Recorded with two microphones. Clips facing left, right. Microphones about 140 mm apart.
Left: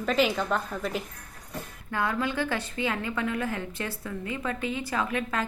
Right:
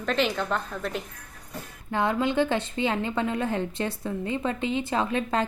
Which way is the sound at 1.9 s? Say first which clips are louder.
Right 4 dB; 25° right (ahead or behind).